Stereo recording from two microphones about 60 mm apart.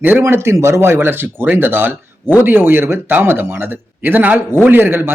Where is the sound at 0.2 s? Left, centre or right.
Right.